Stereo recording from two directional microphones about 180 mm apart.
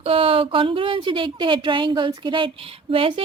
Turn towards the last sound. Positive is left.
turn(degrees=-30)  # may be behind; listen again after turning